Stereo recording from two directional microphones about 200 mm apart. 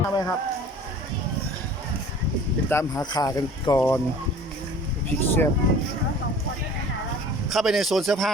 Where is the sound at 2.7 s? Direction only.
15° left (ahead or behind).